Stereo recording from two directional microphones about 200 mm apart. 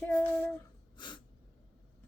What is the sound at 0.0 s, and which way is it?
Child singing, 10° left (ahead or behind).